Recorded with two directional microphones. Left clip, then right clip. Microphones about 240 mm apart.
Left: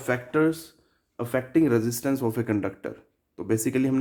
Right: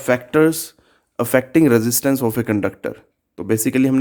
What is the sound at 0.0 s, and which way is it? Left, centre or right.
Speech, right.